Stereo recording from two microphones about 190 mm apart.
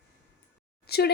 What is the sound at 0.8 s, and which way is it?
Speech, 55° left (ahead or behind).